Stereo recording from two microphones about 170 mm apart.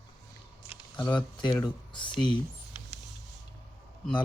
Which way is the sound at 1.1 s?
25° left (ahead or behind).